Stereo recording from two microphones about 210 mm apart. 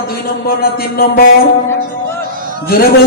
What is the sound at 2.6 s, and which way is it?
Speech, 45° left (ahead or behind).